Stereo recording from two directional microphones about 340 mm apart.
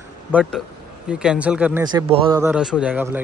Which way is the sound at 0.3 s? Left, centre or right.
Centre.